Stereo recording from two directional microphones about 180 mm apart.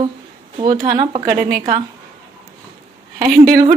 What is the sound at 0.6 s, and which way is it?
Speech, 20° right (ahead or behind).